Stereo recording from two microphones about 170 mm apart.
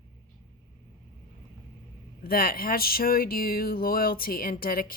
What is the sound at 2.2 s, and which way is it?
Speech, 60° left (ahead or behind).